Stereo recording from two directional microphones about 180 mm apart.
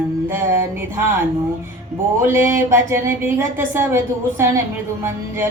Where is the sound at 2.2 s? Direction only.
15° right (ahead or behind).